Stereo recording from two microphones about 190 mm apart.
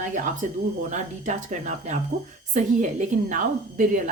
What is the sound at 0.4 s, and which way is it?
A woman's voice, 40° right (ahead or behind).